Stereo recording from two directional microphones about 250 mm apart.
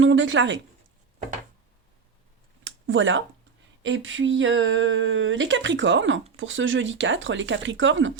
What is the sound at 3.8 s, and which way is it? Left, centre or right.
Speech, right.